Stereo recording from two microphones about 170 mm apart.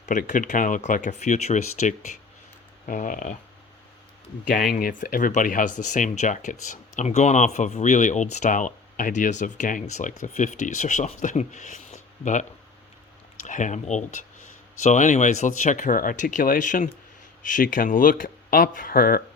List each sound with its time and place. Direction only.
0.0 s speech: 45° left (ahead or behind)
4.4 s speech: 55° left (ahead or behind)